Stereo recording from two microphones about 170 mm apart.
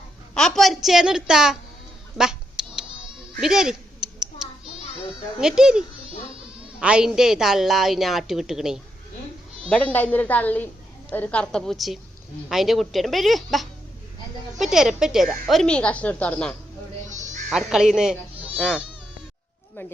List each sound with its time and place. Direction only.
0.3 s a woman's voice: 5° left (ahead or behind)
2.1 s duck: 5° right (ahead or behind)
3.4 s a sound: 5° right (ahead or behind)
5.4 s a woman's voice: 5° right (ahead or behind)
17.1 s bleat: 45° right (ahead or behind)
17.5 s a woman's voice: 5° right (ahead or behind)